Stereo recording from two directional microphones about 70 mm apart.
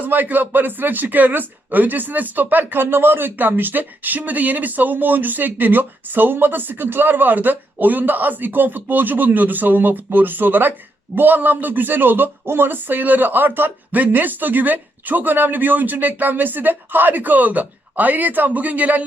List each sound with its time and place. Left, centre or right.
0.0 s speech: right